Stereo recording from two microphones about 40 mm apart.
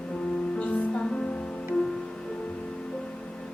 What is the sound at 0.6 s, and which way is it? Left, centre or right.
Music, left.